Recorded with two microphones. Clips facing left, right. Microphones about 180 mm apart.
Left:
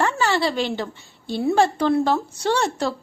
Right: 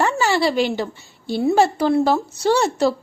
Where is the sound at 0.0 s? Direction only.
10° right (ahead or behind).